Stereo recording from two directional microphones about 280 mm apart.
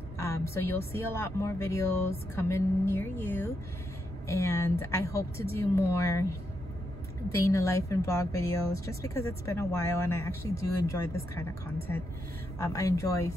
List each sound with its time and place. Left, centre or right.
0.2 s a sound: centre
0.9 s speech: centre
7.2 s speech: centre
12.5 s speech: centre